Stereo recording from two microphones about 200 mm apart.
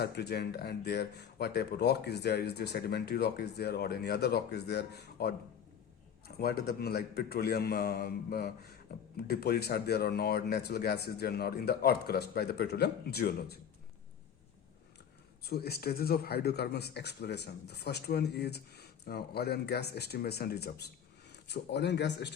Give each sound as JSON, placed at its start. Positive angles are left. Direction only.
{"t": 0.0, "sound": "speech", "side_deg": 55}
{"t": 15.4, "sound": "speech", "side_deg": 50}